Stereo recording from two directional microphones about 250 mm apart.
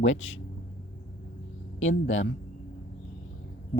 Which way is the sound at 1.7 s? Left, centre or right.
Left.